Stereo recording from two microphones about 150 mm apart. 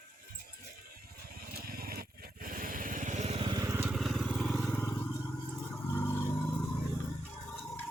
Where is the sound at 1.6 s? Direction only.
90° right; by 3.5 s 45° right (ahead or behind).